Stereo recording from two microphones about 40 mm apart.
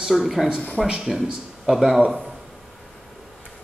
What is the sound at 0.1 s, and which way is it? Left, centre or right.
Speech, centre.